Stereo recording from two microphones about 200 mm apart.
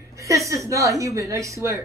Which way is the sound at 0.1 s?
15° right (ahead or behind).